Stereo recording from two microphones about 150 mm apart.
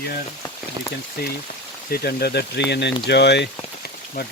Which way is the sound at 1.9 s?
90° left.